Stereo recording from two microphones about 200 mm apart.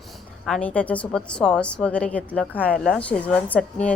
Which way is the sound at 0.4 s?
5° left (ahead or behind).